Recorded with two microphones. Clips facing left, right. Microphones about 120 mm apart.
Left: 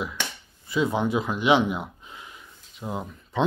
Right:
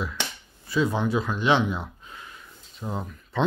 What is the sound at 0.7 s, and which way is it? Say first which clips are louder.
Speech: even; 15° left (ahead or behind).